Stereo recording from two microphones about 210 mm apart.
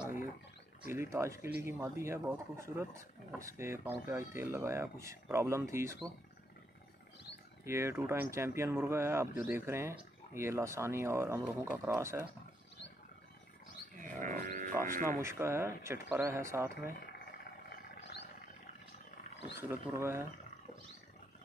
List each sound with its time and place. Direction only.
0.8 s speech: 10° right (ahead or behind)
7.6 s speech: 10° right (ahead or behind)
14.0 s livestock: 40° right (ahead or behind)
15.1 s speech: 10° right (ahead or behind)
16.9 s a sound: 45° left (ahead or behind)
19.3 s wild animals: 55° left (ahead or behind)
19.7 s speech: 10° right (ahead or behind)